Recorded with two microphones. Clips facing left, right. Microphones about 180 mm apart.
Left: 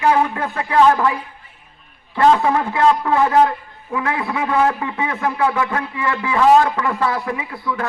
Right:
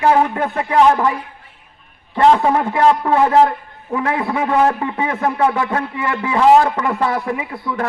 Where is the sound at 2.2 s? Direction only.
25° right (ahead or behind).